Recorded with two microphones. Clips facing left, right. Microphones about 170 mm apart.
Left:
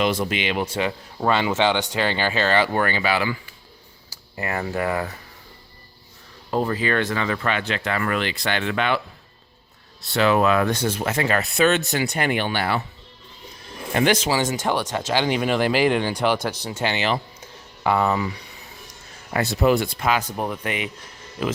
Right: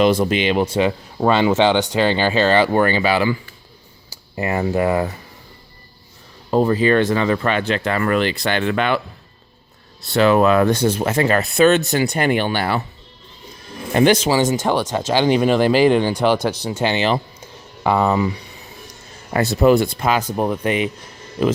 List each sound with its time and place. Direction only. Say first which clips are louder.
0.0 s speech: right 7 dB; 40° right (ahead or behind)
0.7 s speech: right 7 dB; 20° right (ahead or behind)
4.4 s speech: right 6 dB; 20° right (ahead or behind)
6.5 s speech: right 7 dB; 30° right (ahead or behind); by 9.0 s 45° right (ahead or behind)
10.2 s speech: right 5 dB; 40° right (ahead or behind)
13.9 s speech: right 5 dB; 30° right (ahead or behind)
19.3 s speech: right 5 dB; 40° right (ahead or behind)